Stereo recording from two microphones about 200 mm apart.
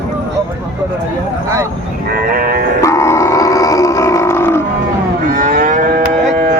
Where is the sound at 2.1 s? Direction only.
50° right (ahead or behind).